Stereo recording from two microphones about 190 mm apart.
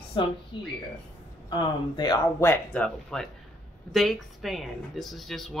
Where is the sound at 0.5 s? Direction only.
25° left (ahead or behind).